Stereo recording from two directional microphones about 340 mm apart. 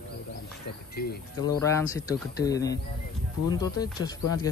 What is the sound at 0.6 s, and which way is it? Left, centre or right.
Speech, left.